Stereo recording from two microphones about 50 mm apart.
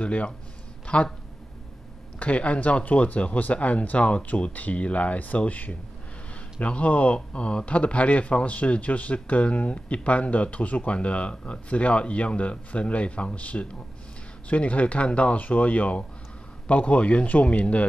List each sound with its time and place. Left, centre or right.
0.0 s speech: left
2.1 s speech: left